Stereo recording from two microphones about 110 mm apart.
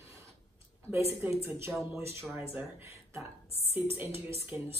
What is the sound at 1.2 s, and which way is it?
Speech, 20° right (ahead or behind).